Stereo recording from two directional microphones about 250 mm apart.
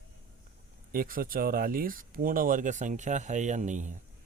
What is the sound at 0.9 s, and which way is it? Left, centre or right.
Speech, right.